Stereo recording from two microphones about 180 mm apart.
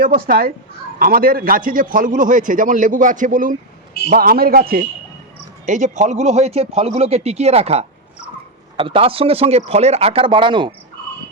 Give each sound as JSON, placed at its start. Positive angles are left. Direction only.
{"t": 0.0, "sound": "a man's voice", "side_deg": -50}
{"t": 5.6, "sound": "speech", "side_deg": -45}